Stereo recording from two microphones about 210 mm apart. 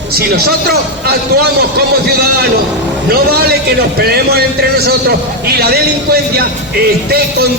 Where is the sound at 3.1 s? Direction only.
50° right (ahead or behind).